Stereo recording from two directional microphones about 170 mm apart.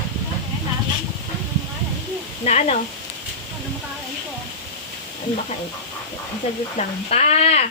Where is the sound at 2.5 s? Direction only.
40° left (ahead or behind).